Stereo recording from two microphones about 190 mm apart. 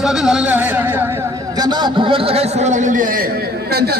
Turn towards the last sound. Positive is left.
turn(degrees=-55)  # may be behind; listen again after turning